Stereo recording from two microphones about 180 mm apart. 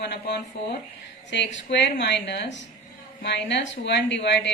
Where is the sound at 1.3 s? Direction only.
85° left.